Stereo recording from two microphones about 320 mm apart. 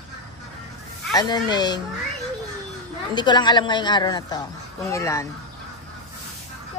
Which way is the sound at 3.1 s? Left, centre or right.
Centre.